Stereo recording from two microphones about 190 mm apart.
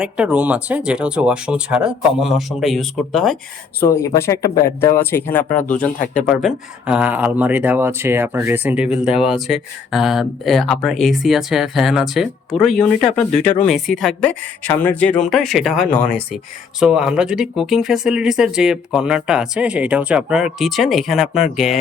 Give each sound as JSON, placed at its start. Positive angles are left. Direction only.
{"t": 0.0, "sound": "speech", "side_deg": -5}
{"t": 3.8, "sound": "speech", "side_deg": 15}
{"t": 5.4, "sound": "speech", "side_deg": 45}
{"t": 6.2, "sound": "speech", "side_deg": -5}
{"t": 16.8, "sound": "speech", "side_deg": -5}